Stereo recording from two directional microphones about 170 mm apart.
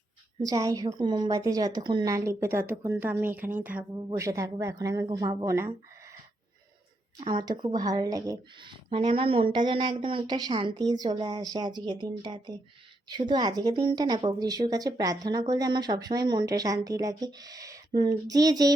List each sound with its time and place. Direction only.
0.4 s a woman's voice: 20° right (ahead or behind)
7.2 s a woman's voice: 25° right (ahead or behind)